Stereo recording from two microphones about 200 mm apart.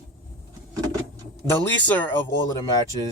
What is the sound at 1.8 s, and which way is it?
Speech, 10° left (ahead or behind).